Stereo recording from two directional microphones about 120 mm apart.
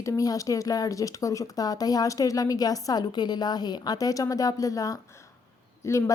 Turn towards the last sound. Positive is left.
turn(degrees=25)  # may be behind; listen again after turning